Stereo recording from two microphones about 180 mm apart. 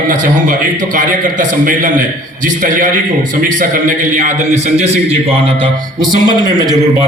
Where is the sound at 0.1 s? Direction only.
45° right (ahead or behind).